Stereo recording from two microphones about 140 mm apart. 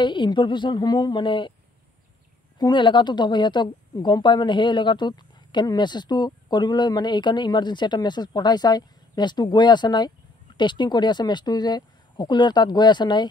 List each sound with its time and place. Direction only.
0.0 s a woman's voice: 35° left (ahead or behind)
2.6 s a woman's voice: 30° left (ahead or behind)